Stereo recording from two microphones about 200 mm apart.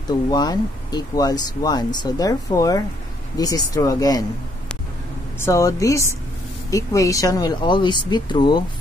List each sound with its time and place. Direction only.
0.3 s speech: 20° left (ahead or behind)
5.4 s speech: 15° left (ahead or behind)